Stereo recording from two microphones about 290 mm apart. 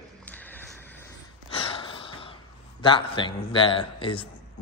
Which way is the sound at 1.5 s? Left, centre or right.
Centre.